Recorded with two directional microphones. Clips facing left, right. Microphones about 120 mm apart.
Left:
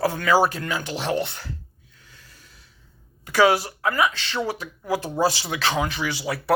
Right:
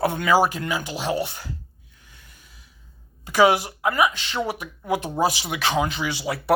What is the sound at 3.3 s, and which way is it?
Speech, 20° right (ahead or behind).